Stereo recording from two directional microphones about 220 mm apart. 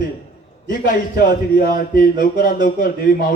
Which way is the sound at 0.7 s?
40° left (ahead or behind).